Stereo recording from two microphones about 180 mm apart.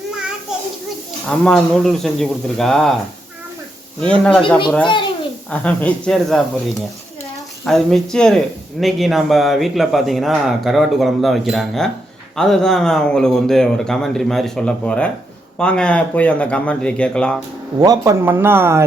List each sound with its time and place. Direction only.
1.3 s speech: 5° left (ahead or behind)
4.0 s speech: 5° left (ahead or behind)
4.8 s a child's voice: 25° left (ahead or behind)
5.5 s speech: 5° left (ahead or behind)
7.6 s speech: centre (ahead or behind)
17.7 s a man's voice: 20° right (ahead or behind)